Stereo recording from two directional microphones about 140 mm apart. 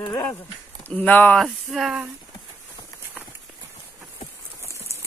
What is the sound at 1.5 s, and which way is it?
Speech, centre (ahead or behind).